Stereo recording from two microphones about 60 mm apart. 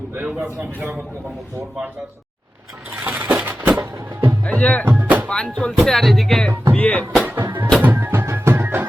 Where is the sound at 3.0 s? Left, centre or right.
Right.